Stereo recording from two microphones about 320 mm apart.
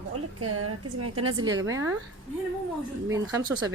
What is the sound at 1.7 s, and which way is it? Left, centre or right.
Speech, centre.